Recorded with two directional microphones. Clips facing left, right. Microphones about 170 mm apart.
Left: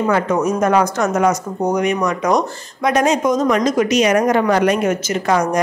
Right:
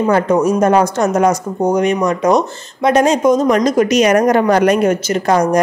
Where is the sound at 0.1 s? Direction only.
30° right (ahead or behind).